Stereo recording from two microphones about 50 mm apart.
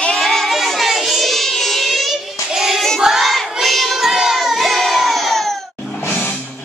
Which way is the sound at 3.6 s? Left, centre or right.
Centre.